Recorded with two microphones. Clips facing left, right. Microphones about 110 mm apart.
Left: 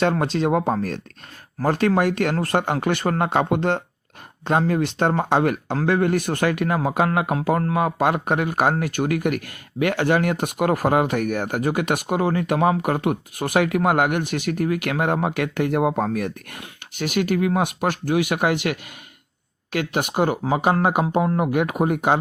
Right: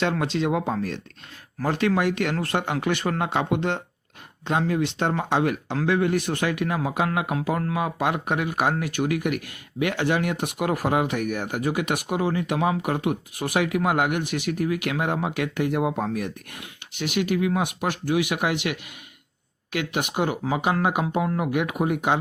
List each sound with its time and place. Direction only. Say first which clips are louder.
0.0 s speech: left 4 dB; 40° left (ahead or behind)